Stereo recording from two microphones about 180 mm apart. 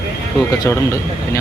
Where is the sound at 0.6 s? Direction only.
15° left (ahead or behind).